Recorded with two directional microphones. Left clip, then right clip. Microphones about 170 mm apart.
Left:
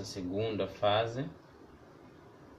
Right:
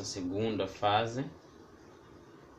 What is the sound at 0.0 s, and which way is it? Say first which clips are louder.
Speech: right 1 dB; 35° right (ahead or behind).